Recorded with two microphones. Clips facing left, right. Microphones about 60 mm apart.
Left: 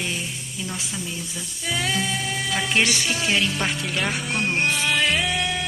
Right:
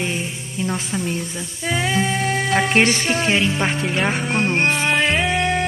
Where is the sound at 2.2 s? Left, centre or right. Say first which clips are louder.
Right 7 dB; right.